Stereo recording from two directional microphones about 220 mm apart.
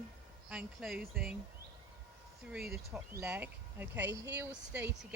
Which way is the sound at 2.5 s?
5° right (ahead or behind).